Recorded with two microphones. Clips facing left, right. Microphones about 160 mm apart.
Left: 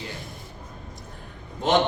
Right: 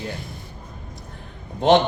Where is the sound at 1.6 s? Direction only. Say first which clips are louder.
Right 6 dB; 65° right (ahead or behind).